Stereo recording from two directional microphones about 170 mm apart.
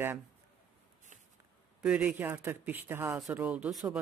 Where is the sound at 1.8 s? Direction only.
5° right (ahead or behind).